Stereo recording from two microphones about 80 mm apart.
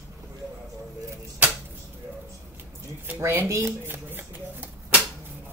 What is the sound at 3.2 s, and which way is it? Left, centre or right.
Speech, right.